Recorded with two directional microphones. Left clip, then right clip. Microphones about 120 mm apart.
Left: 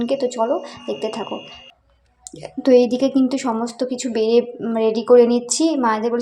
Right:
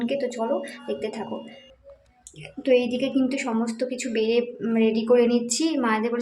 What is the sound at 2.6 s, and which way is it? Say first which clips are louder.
A woman's voice: left 7 dB; 40° left (ahead or behind).